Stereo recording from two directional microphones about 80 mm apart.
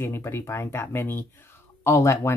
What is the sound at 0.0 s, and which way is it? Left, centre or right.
Speech, left.